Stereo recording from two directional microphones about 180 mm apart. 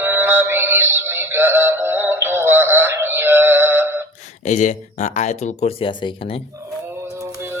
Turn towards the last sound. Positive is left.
turn(degrees=-15)  # may be behind; listen again after turning